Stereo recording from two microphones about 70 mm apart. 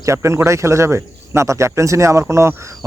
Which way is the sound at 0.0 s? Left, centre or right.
Right.